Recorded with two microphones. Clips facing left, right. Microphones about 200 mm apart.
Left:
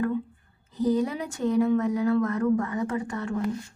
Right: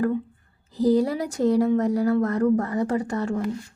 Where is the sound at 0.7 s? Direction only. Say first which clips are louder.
Right 4 dB; 35° right (ahead or behind).